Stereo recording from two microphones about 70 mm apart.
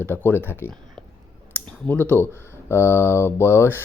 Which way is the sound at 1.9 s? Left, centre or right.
Left.